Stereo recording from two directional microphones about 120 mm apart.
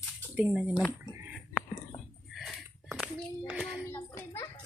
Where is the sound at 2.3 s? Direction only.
Centre (ahead or behind).